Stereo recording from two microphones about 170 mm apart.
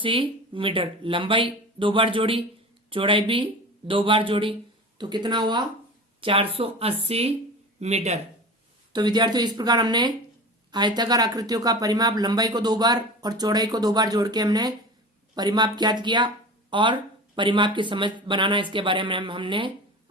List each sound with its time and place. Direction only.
0.0 s speech: 30° right (ahead or behind)
8.9 s speech: 25° right (ahead or behind)